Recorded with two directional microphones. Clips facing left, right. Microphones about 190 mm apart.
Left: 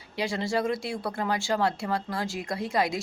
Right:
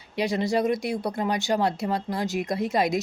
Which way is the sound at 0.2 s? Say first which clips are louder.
Right 4 dB; 20° right (ahead or behind).